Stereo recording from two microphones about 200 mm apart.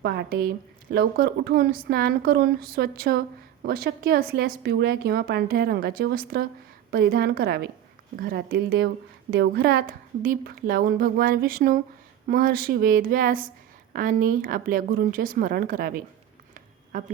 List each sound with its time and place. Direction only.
0.0 s a woman's voice: 55° right (ahead or behind)